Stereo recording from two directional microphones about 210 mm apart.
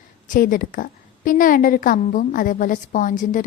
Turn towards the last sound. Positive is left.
turn(degrees=40)  # may be behind; listen again after turning